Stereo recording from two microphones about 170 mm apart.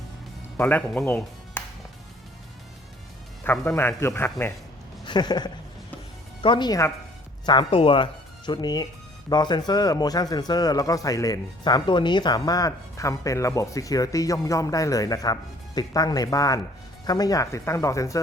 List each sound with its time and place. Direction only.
0.5 s speech: 10° left (ahead or behind)
3.4 s speech: 15° left (ahead or behind)
5.0 s speech: 25° left (ahead or behind)